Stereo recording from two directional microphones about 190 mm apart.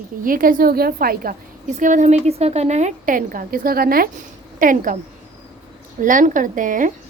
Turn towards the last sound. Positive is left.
turn(degrees=-45)  # may be behind; listen again after turning